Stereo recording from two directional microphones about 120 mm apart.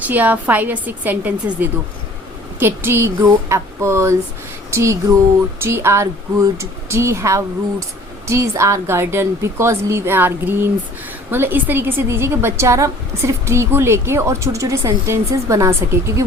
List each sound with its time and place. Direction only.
0.0 s a woman's voice: 15° right (ahead or behind)